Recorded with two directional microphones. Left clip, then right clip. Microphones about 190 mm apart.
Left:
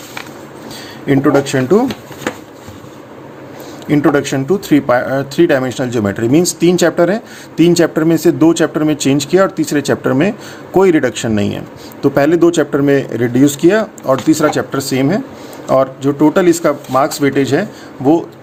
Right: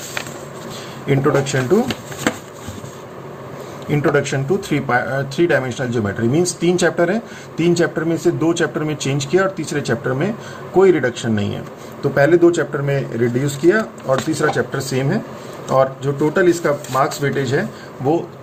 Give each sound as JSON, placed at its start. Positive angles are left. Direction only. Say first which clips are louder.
{"t": 1.3, "sound": "speech", "louder": "left 5 dB", "side_deg": 45}
{"t": 3.8, "sound": "speech", "louder": "left 5 dB", "side_deg": 50}
{"t": 12.1, "sound": "speech", "louder": "left 1 dB", "side_deg": 65}